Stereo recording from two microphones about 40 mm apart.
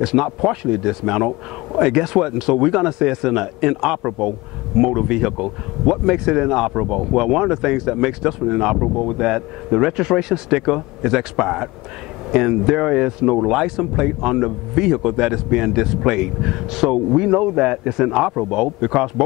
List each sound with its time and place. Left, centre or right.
0.0 s speech: centre
5.0 s speech: centre
8.5 s speech: centre